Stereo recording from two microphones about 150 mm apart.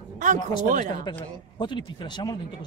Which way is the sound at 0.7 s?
60° right (ahead or behind).